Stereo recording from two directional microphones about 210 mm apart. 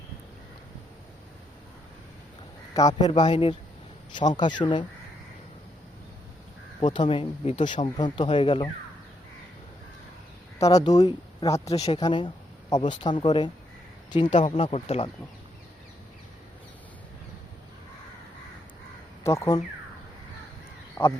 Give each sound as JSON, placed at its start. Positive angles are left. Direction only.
{"t": 2.7, "sound": "speech", "side_deg": 20}
{"t": 6.8, "sound": "speech", "side_deg": 20}
{"t": 10.6, "sound": "speech", "side_deg": 15}
{"t": 19.2, "sound": "speech", "side_deg": 15}
{"t": 21.0, "sound": "speech", "side_deg": 20}